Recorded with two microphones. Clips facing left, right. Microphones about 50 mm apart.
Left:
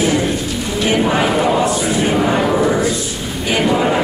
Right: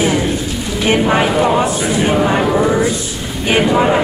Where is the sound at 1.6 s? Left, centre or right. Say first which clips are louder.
Right 1 dB; centre.